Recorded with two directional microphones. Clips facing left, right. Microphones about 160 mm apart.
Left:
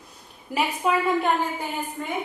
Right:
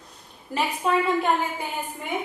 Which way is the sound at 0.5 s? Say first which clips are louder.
Even; 5° left (ahead or behind).